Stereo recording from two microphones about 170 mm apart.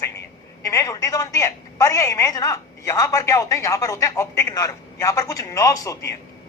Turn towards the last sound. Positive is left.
turn(degrees=20)  # may be behind; listen again after turning